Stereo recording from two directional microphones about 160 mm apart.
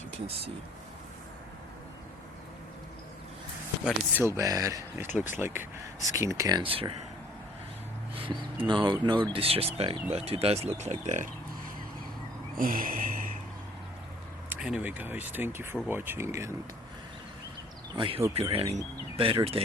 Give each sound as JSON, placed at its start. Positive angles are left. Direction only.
{"t": 3.8, "sound": "speech", "side_deg": -15}
{"t": 5.0, "sound": "speech", "side_deg": 50}
{"t": 5.4, "sound": "speech", "side_deg": -15}
{"t": 6.6, "sound": "speech", "side_deg": -35}
{"t": 8.1, "sound": "a sound", "side_deg": -35}
{"t": 8.6, "sound": "speech", "side_deg": -30}
{"t": 12.5, "sound": "a sound", "side_deg": -60}
{"t": 14.5, "sound": "speech", "side_deg": -10}
{"t": 17.9, "sound": "speech", "side_deg": -35}